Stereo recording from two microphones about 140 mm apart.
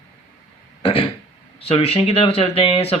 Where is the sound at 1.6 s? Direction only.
45° left (ahead or behind).